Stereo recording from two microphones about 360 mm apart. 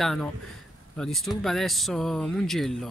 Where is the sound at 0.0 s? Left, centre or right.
Centre.